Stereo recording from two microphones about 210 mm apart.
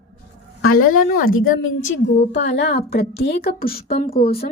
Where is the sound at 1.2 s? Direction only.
75° left (ahead or behind).